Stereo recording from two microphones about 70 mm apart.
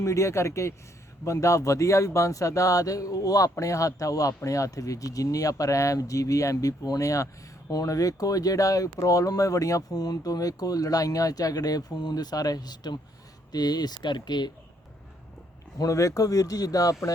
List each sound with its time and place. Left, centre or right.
0.0 s speech: left
15.8 s speech: left